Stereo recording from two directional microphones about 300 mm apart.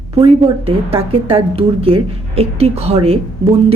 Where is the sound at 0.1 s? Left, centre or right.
Centre.